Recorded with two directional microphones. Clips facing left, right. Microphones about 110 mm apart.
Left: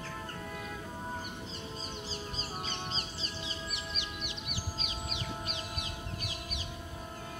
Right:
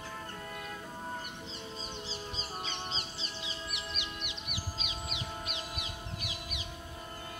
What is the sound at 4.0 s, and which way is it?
Music, 35° left (ahead or behind).